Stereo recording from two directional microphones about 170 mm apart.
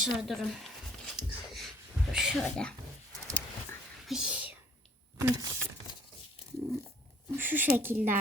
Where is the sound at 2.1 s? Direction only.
Centre (ahead or behind).